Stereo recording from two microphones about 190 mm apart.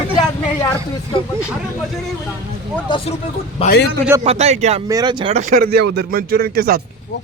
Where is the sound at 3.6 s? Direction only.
30° left (ahead or behind).